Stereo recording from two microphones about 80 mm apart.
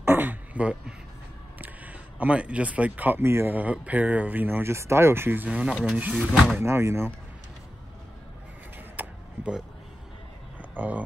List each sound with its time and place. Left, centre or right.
0.0 s beatboxing: right
1.6 s speech: centre
3.3 s speech: right
3.5 s speech: centre
5.5 s speech: centre
6.6 s speech: right
8.7 s a sound: right
10.8 s speech: right